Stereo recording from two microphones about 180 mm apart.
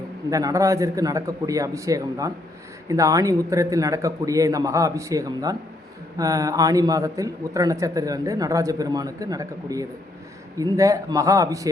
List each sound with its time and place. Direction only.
0.3 s a man's voice: 20° right (ahead or behind)